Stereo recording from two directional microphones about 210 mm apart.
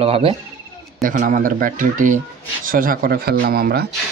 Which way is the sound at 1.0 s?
40° right (ahead or behind).